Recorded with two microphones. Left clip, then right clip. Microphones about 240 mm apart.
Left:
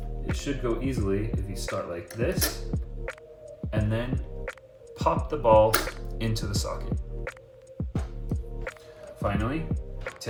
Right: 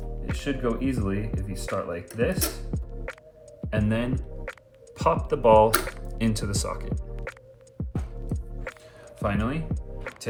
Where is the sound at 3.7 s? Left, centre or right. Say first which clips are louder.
Right 3 dB; right.